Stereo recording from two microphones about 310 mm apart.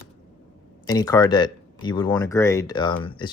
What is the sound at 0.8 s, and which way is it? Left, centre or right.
Speech, centre.